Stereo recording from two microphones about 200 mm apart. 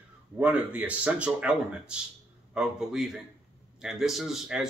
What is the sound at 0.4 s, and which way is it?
Speech, 5° right (ahead or behind).